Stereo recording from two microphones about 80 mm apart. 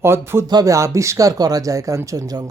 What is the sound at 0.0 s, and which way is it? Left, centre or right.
Speech, right.